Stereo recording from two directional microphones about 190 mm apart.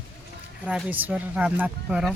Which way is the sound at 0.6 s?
5° right (ahead or behind).